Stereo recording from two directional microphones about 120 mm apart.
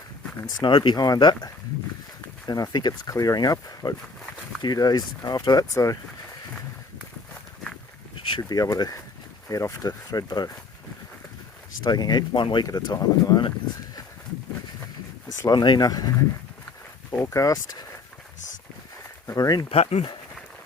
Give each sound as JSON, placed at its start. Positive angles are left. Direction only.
{"t": 0.6, "sound": "speech", "side_deg": 40}
{"t": 8.4, "sound": "speech", "side_deg": 30}
{"t": 11.8, "sound": "speech", "side_deg": 35}
{"t": 12.6, "sound": "speech", "side_deg": 35}
{"t": 15.3, "sound": "speech", "side_deg": 30}
{"t": 19.3, "sound": "speech", "side_deg": 30}
{"t": 19.7, "sound": "speech", "side_deg": 60}